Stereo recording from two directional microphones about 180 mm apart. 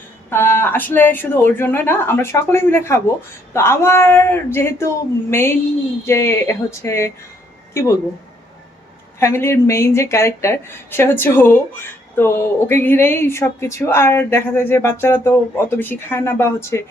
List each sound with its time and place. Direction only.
0.3 s a woman's voice: 15° left (ahead or behind)
9.2 s a woman's voice: 15° left (ahead or behind)